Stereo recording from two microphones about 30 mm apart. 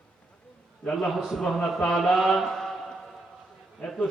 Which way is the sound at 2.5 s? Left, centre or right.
Left.